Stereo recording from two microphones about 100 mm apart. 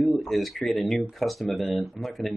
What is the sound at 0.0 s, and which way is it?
Speech, centre (ahead or behind).